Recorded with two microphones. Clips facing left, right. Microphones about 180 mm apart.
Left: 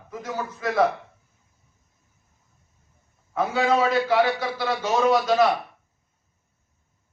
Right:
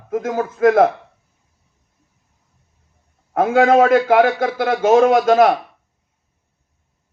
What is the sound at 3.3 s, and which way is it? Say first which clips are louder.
A man's voice: right 9 dB; 50° right (ahead or behind).